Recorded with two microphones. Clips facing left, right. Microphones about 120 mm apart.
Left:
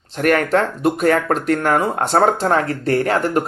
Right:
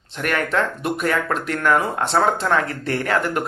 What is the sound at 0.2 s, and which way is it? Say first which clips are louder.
Speech: left 6 dB; 45° left (ahead or behind).